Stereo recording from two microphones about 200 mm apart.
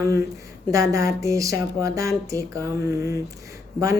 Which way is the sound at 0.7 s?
15° right (ahead or behind).